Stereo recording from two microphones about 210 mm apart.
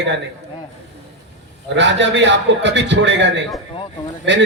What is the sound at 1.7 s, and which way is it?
A man's voice, 60° right (ahead or behind).